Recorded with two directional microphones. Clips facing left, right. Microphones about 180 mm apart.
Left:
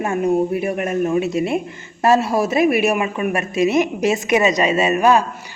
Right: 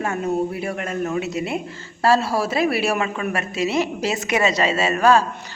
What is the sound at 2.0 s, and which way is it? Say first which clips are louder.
A woman's voice: left 3 dB; 20° left (ahead or behind).